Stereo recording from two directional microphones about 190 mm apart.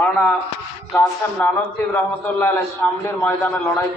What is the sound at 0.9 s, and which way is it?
A man's voice, 10° left (ahead or behind).